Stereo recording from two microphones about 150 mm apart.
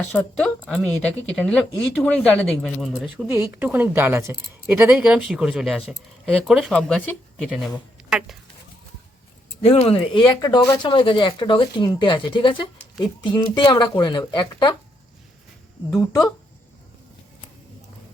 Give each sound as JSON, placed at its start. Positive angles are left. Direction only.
{"t": 0.1, "sound": "speech", "side_deg": 10}
{"t": 3.2, "sound": "speech", "side_deg": -15}
{"t": 9.6, "sound": "speech", "side_deg": 40}
{"t": 10.2, "sound": "speech", "side_deg": 25}
{"t": 16.0, "sound": "speech", "side_deg": 20}